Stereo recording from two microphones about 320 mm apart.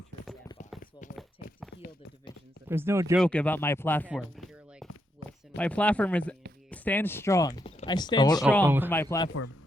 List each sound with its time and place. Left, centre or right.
1.0 s run: left
2.6 s speech: centre
3.2 s speech: centre
5.2 s a sound: left
5.5 s speech: centre
8.6 s speech: centre
8.9 s speech: centre